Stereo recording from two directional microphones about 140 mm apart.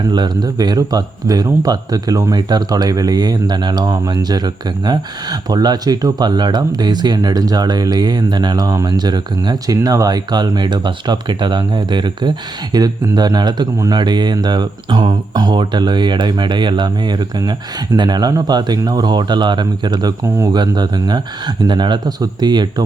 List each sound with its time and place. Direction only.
0.1 s speech: 30° right (ahead or behind)